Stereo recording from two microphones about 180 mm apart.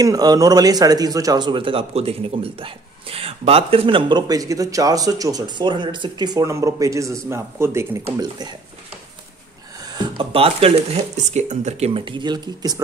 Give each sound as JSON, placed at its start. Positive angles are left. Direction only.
{"t": 0.0, "sound": "speech", "side_deg": -20}
{"t": 10.1, "sound": "speech", "side_deg": -30}